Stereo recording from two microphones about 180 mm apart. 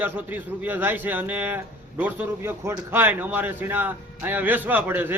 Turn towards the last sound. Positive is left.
turn(degrees=-10)  # may be behind; listen again after turning